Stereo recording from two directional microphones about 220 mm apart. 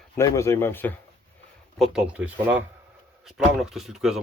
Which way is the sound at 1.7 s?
5° right (ahead or behind).